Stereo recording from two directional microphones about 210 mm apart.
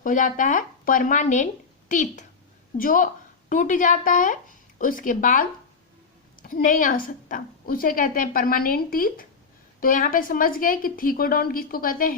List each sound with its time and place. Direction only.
0.0 s a woman's voice: 40° left (ahead or behind)